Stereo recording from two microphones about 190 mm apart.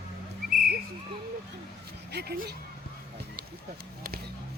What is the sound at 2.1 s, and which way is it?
Speech, 60° right (ahead or behind).